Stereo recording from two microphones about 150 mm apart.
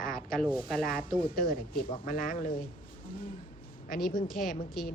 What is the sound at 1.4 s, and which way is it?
Speech, 70° left (ahead or behind).